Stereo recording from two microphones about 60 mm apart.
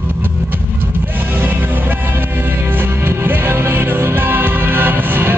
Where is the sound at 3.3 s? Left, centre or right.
Right.